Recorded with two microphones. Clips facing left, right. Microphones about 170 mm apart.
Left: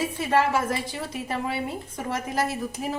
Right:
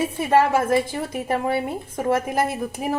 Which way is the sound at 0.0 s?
55° right (ahead or behind).